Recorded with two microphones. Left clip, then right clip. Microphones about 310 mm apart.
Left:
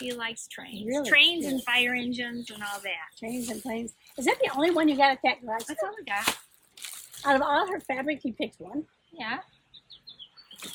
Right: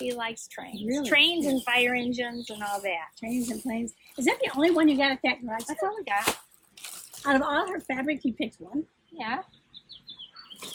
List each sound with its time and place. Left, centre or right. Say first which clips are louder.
0.0 s speech: right 2 dB; centre
3.3 s a woman's voice: right 2 dB; centre
5.6 s speech: right 3 dB; centre
6.8 s a sound: left 1 dB; centre
7.2 s a woman's voice: left 1 dB; centre
9.1 s speech: right 2 dB; centre